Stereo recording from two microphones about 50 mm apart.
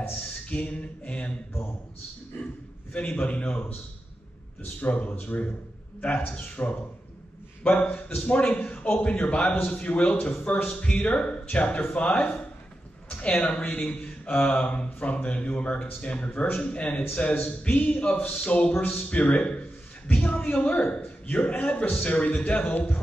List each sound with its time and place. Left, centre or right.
0.5 s speech: left
2.4 s a man's voice: left
4.7 s speech: left
5.1 s speech: left
5.9 s speech: left
16.3 s speech: left
16.5 s speech: centre